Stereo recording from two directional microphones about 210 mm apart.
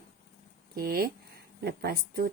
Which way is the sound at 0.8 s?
45° right (ahead or behind).